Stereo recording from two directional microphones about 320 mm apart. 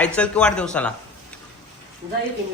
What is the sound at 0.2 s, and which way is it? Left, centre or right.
Speech, centre.